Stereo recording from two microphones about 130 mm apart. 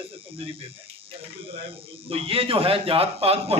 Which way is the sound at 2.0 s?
45° right (ahead or behind).